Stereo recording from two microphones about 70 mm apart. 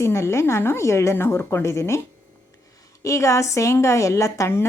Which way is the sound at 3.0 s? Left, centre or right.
Left.